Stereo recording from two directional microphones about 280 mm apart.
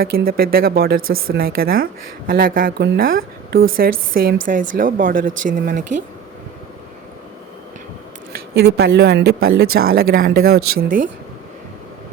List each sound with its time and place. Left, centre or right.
0.0 s speech: right
1.0 s speech: right
1.4 s a woman's voice: right
8.3 s a sound: right
9.0 s speech: right